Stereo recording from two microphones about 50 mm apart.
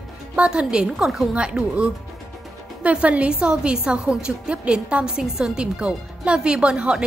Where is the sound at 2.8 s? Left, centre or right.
Right.